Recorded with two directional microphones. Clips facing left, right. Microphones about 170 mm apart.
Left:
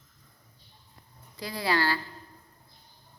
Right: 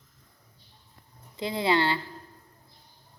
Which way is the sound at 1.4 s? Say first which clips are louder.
Right 4 dB; 20° right (ahead or behind).